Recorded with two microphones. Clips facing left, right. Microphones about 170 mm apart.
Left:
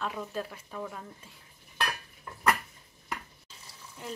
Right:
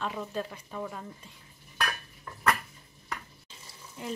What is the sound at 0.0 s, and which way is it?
Speech, centre (ahead or behind).